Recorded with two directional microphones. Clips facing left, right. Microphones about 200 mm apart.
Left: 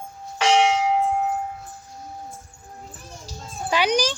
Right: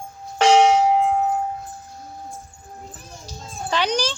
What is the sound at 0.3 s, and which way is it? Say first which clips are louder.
Church bell: right 4 dB; 45° right (ahead or behind).